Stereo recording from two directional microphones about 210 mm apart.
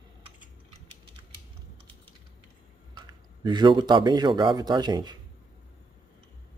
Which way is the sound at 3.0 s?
20° right (ahead or behind).